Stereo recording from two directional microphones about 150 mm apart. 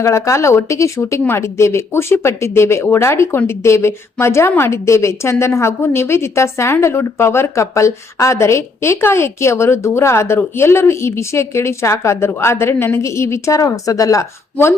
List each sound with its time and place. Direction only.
0.0 s speech: 20° left (ahead or behind)